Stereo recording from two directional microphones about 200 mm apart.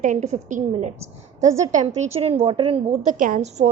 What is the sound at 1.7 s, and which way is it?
A woman's voice, 35° right (ahead or behind).